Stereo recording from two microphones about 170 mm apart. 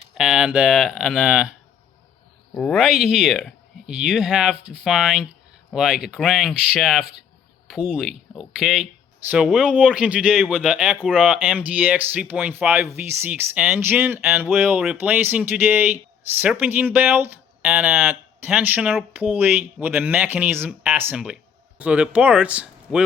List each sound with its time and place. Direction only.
0.1 s speech: 5° right (ahead or behind)
2.6 s speech: 5° left (ahead or behind)